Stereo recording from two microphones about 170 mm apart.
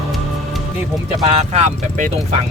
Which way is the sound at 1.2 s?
40° right (ahead or behind).